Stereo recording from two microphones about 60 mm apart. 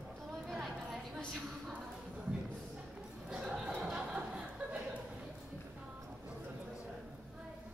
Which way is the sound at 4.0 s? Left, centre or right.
Centre.